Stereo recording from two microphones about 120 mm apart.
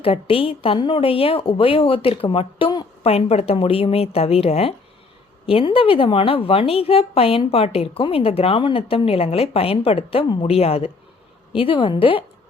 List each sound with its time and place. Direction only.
0.0 s a woman's voice: 50° left (ahead or behind)